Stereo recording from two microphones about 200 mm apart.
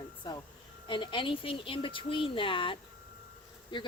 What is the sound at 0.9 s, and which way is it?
A woman's voice, 25° left (ahead or behind).